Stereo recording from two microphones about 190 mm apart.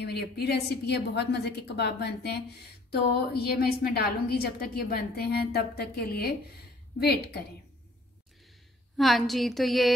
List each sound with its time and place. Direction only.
0.0 s a woman's voice: 60° left (ahead or behind)
8.9 s a woman's voice: centre (ahead or behind)